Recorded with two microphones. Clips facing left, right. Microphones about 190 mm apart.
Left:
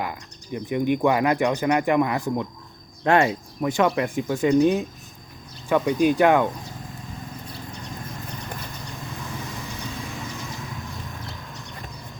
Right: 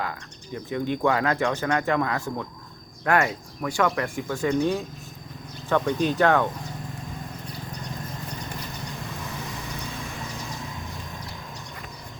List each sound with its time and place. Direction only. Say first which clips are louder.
0.0 s speech: left 1 dB; 15° left (ahead or behind)